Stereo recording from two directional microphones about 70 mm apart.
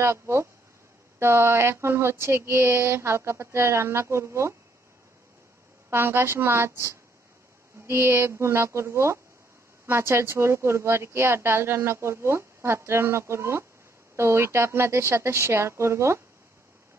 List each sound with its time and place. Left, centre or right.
0.0 s a woman's voice: right
5.9 s a woman's voice: right